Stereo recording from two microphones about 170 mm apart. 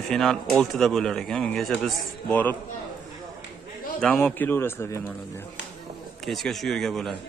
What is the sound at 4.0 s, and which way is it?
A man's voice, 10° left (ahead or behind).